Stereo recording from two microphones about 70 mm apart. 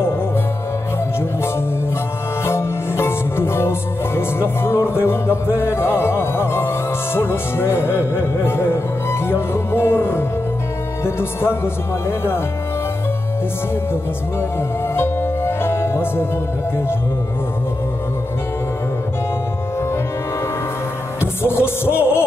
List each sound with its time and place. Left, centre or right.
2.4 s music: left
15.0 s music: left
21.2 s music: left